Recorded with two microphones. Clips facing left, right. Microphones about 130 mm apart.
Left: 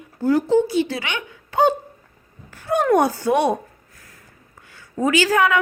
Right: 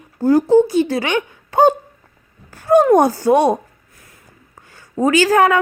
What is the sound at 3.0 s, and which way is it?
Speech, 40° right (ahead or behind).